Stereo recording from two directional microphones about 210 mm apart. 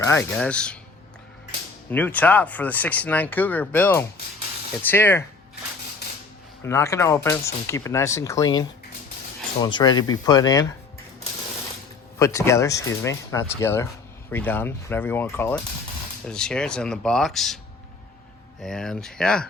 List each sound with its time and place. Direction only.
0.0 s speech: 10° left (ahead or behind)
1.9 s speech: 10° left (ahead or behind)
6.7 s speech: 15° left (ahead or behind)
12.2 s speech: 15° left (ahead or behind)
18.6 s speech: 5° left (ahead or behind)